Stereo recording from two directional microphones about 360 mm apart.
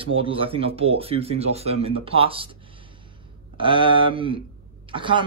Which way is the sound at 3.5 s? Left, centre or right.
Centre.